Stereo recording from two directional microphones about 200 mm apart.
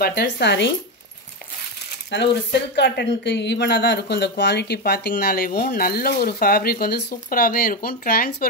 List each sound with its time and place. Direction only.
0.0 s speech: 55° left (ahead or behind)
2.1 s speech: 55° left (ahead or behind)